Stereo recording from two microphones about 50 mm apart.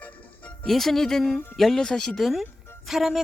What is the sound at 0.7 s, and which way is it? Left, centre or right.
Speech, centre.